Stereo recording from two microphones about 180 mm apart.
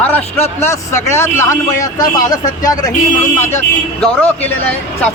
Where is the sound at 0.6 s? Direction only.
15° left (ahead or behind).